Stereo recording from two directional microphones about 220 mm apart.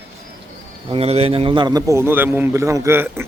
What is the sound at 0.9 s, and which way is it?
A man's voice, 25° right (ahead or behind).